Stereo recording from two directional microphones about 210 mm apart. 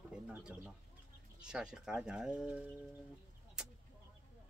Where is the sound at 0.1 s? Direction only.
5° right (ahead or behind).